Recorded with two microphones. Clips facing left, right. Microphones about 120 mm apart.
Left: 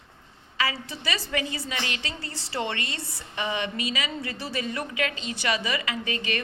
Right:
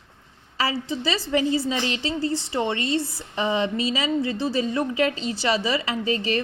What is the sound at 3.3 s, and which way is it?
A woman's voice, 30° right (ahead or behind).